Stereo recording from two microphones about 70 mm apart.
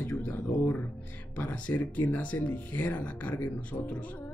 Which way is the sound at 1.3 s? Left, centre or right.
Left.